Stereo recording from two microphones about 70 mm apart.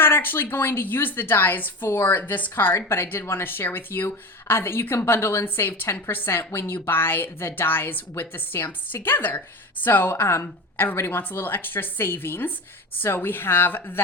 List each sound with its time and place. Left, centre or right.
0.0 s a woman's voice: left